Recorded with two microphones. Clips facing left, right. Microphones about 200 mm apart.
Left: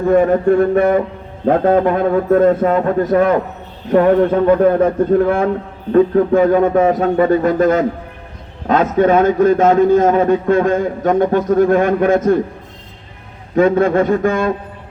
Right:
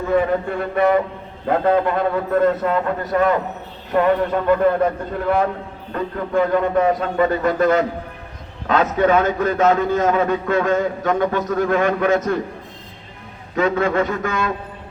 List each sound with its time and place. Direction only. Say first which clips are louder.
0.1 s a man's voice: left 7 dB; 45° left (ahead or behind)
13.6 s a man's voice: left 6 dB; 50° left (ahead or behind)